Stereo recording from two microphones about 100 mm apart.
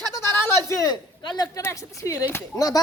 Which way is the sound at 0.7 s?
35° left (ahead or behind).